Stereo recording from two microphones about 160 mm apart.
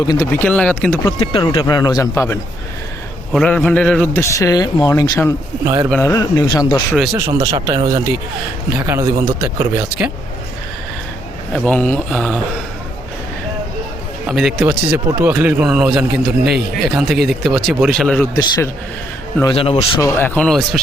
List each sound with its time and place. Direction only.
0.3 s a man's voice: 10° left (ahead or behind)
1.2 s speech: 30° left (ahead or behind)
3.3 s a man's voice: 5° left (ahead or behind)
5.6 s speech: 20° right (ahead or behind)
6.0 s speech: 20° left (ahead or behind)
7.2 s speech: 20° right (ahead or behind)
11.5 s a man's voice: 10° left (ahead or behind)
14.3 s speech: centre (ahead or behind)
18.3 s speech: 25° left (ahead or behind)
19.5 s speech: 35° left (ahead or behind)
20.0 s a man's voice: 15° left (ahead or behind)